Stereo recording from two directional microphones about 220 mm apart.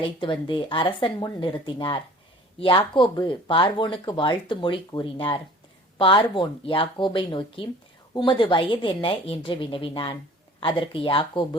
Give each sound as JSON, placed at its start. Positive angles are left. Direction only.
{"t": 0.0, "sound": "speech", "side_deg": 20}